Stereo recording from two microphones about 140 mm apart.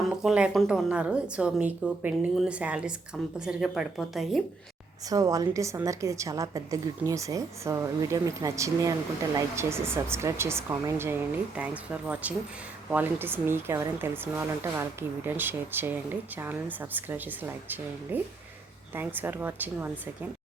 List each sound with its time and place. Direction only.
0.2 s a woman's voice: 5° right (ahead or behind)
5.0 s a woman's voice: 25° right (ahead or behind)